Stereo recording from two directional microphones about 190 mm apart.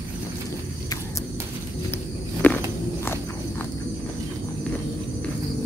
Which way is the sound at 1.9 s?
10° left (ahead or behind).